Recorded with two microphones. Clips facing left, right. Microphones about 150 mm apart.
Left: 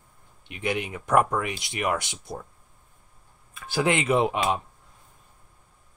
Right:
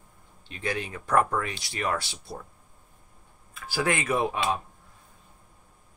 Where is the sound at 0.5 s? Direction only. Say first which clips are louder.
Left 3 dB; 20° left (ahead or behind).